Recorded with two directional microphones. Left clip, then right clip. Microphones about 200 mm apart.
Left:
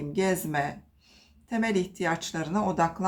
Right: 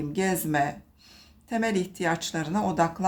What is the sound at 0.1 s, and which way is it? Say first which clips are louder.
Speech: even; 20° right (ahead or behind).